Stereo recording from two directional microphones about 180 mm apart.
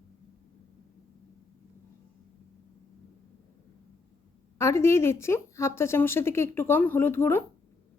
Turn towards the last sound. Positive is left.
turn(degrees=10)  # may be behind; listen again after turning